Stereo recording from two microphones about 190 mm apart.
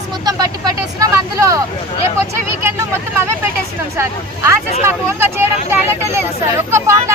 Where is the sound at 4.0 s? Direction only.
15° right (ahead or behind).